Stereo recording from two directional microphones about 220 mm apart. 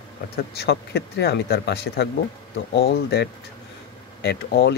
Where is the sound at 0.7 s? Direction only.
50° left (ahead or behind).